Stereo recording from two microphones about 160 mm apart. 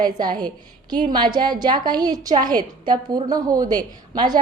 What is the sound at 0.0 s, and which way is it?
A woman's voice, 25° right (ahead or behind).